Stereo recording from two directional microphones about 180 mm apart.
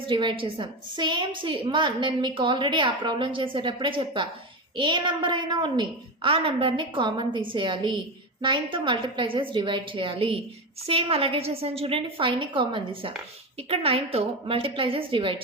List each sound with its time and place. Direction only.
0.0 s a woman's voice: 30° right (ahead or behind)